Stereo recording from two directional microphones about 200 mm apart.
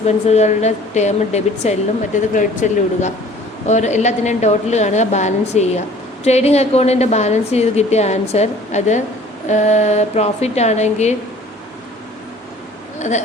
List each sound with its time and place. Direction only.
0.3 s a woman's voice: 35° left (ahead or behind)
13.0 s speech: 35° left (ahead or behind)